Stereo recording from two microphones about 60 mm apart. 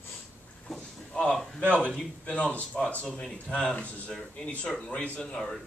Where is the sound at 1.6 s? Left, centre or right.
Left.